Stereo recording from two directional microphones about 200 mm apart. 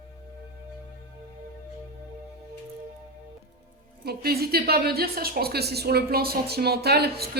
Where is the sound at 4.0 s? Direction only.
50° right (ahead or behind).